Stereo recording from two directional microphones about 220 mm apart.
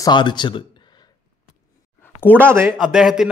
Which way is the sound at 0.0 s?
20° left (ahead or behind).